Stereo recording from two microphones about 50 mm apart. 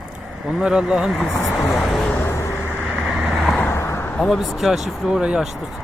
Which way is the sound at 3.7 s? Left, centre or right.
Left.